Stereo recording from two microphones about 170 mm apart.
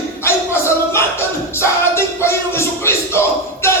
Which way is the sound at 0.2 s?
15° left (ahead or behind).